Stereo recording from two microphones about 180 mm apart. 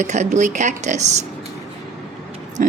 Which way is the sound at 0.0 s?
40° right (ahead or behind).